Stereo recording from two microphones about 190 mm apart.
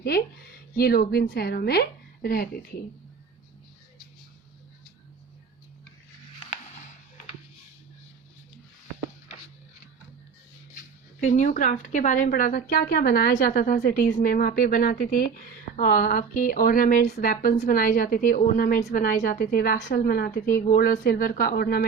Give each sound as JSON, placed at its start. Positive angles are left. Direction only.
{"t": 0.8, "sound": "a woman's voice", "side_deg": 55}
{"t": 6.5, "sound": "a sound", "side_deg": 40}
{"t": 11.2, "sound": "a woman's voice", "side_deg": 40}